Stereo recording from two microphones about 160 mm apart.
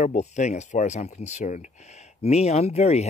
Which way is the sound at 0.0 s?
45° left (ahead or behind).